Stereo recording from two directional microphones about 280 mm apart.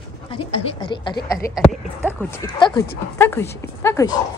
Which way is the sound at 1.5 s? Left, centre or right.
Centre.